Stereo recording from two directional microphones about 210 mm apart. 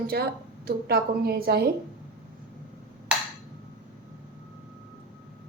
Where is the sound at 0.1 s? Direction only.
45° right (ahead or behind).